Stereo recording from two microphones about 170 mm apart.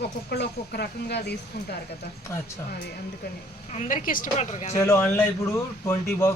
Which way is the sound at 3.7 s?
45° left (ahead or behind).